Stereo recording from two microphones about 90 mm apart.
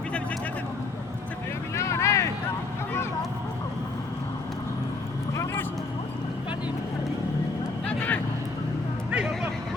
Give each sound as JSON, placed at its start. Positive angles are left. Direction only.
{"t": 1.7, "sound": "vehicle", "side_deg": 35}
{"t": 7.9, "sound": "vehicle", "side_deg": 20}
{"t": 9.1, "sound": "a sound", "side_deg": -10}